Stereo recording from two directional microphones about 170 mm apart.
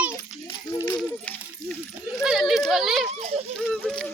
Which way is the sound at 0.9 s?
5° left (ahead or behind).